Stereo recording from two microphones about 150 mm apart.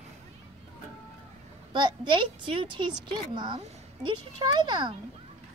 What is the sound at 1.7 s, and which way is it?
A woman's voice, 30° right (ahead or behind).